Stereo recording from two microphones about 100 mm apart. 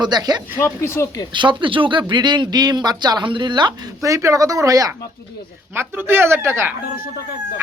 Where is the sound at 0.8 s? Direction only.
25° left (ahead or behind).